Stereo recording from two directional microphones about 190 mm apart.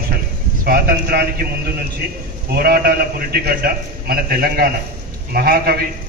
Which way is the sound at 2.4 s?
55° right (ahead or behind).